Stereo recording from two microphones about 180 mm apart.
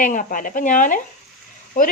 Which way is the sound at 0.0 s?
45° left (ahead or behind).